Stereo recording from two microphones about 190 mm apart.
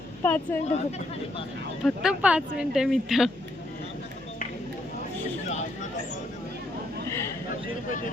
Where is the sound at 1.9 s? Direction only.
5° right (ahead or behind).